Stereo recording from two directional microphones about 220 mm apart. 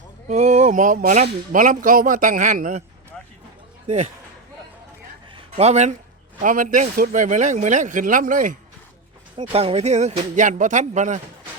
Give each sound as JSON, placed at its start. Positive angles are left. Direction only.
{"t": 0.3, "sound": "speech", "side_deg": -30}
{"t": 5.5, "sound": "speech", "side_deg": -30}
{"t": 9.4, "sound": "speech", "side_deg": -25}